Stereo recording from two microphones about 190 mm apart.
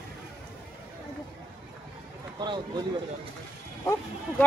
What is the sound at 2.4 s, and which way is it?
Speech, 20° right (ahead or behind).